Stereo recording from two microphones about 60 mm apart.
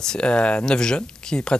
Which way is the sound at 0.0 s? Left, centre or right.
Centre.